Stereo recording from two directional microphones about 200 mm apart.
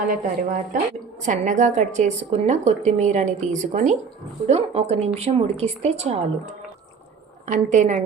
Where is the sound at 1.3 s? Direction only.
35° right (ahead or behind).